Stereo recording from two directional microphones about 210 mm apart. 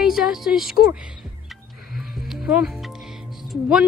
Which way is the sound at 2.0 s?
Centre (ahead or behind).